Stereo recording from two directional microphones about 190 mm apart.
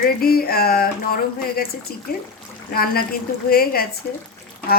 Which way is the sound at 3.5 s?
50° left (ahead or behind).